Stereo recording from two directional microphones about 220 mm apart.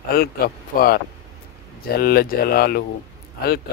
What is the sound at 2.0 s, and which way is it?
Speech, 45° left (ahead or behind).